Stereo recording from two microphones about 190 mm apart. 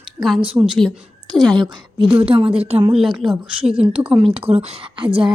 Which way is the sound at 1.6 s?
25° right (ahead or behind).